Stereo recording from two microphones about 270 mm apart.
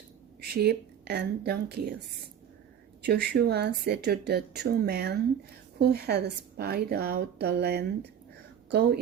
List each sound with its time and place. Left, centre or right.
0.4 s speech: right
3.0 s speech: right